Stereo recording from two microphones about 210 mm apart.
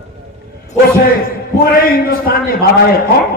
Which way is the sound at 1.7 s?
45° left (ahead or behind).